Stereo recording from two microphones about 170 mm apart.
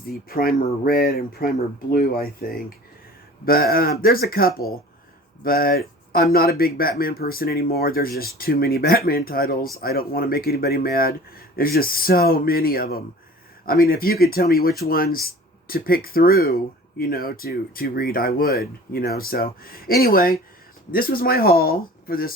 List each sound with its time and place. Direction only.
0.1 s speech: 60° left (ahead or behind)